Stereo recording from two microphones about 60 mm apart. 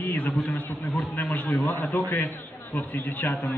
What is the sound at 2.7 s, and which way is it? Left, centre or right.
Speech, left.